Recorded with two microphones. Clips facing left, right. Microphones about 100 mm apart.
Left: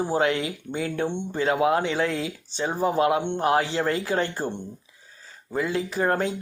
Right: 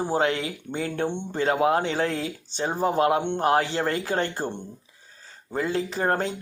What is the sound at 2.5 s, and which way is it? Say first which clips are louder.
Speech: even; 55° right (ahead or behind).